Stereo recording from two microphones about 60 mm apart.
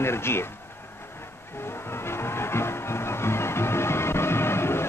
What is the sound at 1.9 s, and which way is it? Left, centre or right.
Music, left.